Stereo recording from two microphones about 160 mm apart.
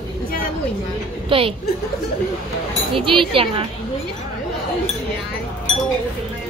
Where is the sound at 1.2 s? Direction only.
35° right (ahead or behind).